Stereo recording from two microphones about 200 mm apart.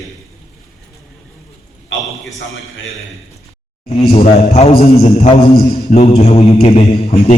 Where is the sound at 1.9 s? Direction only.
75° left (ahead or behind).